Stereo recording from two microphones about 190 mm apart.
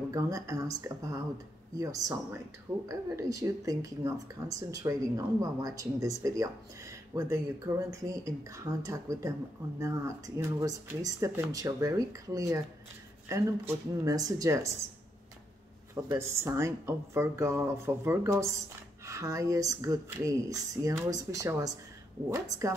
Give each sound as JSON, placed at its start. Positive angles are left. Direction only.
{"t": 0.1, "sound": "speech", "side_deg": -15}
{"t": 15.9, "sound": "speech", "side_deg": -15}